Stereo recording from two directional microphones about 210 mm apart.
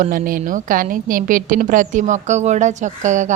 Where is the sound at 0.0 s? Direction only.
40° right (ahead or behind).